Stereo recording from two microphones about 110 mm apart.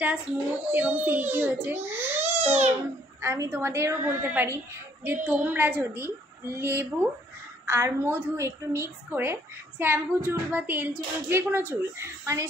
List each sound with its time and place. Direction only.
0.0 s a woman's voice: 10° right (ahead or behind)